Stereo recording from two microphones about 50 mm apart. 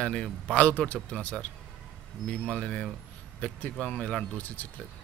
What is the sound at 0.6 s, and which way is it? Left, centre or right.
Speech, left.